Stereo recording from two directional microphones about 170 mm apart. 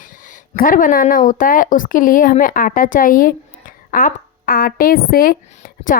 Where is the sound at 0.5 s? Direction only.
55° left (ahead or behind).